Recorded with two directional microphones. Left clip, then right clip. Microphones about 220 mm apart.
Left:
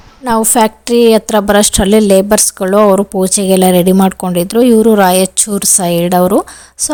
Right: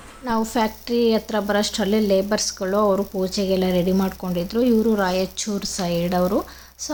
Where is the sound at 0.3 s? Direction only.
45° left (ahead or behind).